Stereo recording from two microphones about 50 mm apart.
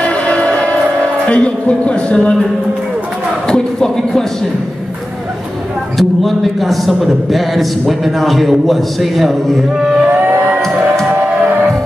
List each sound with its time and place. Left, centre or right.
0.0 s music: left
3.4 s speech: centre
5.9 s a man's voice: centre
9.8 s a sound: centre
10.1 s music: right